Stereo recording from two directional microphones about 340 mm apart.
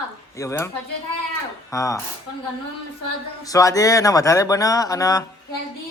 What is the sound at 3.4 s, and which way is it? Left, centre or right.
Speech, centre.